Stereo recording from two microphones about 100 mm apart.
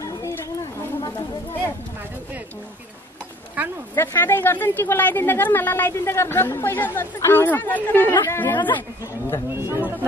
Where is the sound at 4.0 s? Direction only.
20° left (ahead or behind).